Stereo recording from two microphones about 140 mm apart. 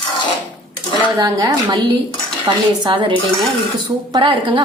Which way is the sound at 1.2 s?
25° right (ahead or behind).